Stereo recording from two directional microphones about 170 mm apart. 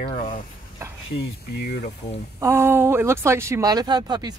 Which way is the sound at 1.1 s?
70° left (ahead or behind).